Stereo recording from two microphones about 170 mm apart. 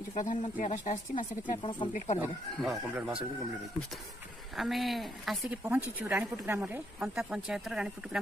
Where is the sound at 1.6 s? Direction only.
30° left (ahead or behind).